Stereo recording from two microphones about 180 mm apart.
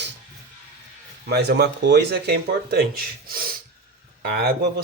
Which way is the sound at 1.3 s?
65° right (ahead or behind).